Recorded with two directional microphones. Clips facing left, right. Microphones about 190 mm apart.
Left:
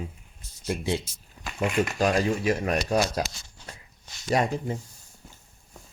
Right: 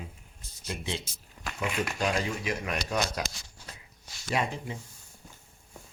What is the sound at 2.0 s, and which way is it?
Speech, 35° left (ahead or behind).